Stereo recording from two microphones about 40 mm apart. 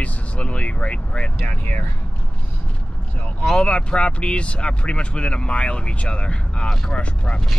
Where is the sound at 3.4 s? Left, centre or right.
Left.